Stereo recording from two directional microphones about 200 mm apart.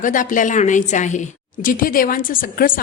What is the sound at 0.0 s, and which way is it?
A woman's voice, 40° left (ahead or behind).